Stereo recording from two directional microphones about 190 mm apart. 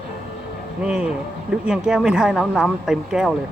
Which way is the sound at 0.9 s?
5° right (ahead or behind).